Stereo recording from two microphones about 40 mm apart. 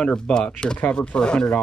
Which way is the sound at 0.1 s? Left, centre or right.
Centre.